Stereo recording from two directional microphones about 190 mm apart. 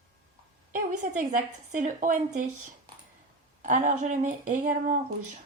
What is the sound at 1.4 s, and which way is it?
A woman's voice, 40° right (ahead or behind).